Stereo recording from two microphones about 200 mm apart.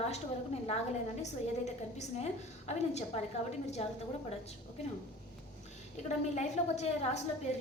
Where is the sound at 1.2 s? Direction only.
35° left (ahead or behind).